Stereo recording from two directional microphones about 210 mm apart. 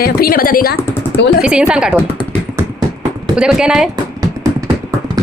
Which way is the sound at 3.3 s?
5° right (ahead or behind).